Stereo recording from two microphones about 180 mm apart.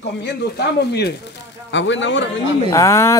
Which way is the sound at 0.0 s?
70° left (ahead or behind).